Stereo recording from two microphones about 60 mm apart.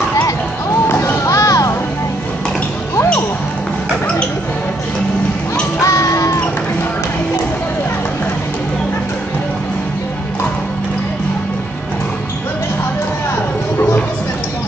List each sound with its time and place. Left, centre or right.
0.8 s a sound: left
1.2 s music: left
5.8 s music: left